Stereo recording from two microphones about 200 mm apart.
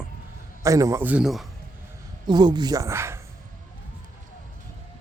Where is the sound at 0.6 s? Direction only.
15° right (ahead or behind).